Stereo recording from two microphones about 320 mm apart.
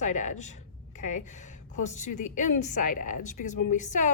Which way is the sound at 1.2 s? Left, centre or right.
Left.